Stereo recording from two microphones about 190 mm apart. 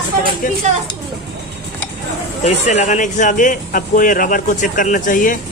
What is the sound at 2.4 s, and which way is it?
Speech, 35° left (ahead or behind).